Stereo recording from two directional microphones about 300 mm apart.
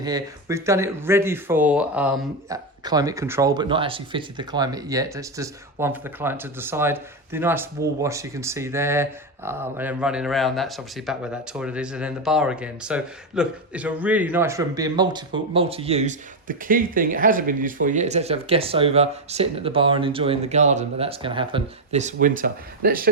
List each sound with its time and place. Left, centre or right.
0.0 s speech: centre
2.5 s speech: centre; by 23.0 s right